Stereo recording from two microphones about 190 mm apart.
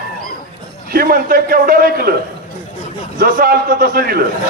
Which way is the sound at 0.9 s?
50° right (ahead or behind).